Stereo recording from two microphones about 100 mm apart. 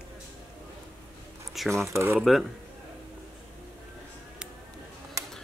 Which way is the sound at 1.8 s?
30° right (ahead or behind).